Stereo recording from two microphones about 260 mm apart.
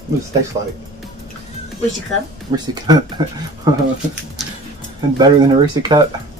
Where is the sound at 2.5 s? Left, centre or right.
Centre.